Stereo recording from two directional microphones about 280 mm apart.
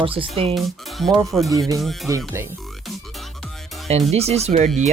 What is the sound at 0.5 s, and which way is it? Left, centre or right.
Speech, centre.